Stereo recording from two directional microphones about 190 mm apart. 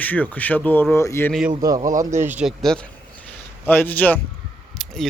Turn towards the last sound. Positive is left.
turn(degrees=0)  # may be behind; listen again after turning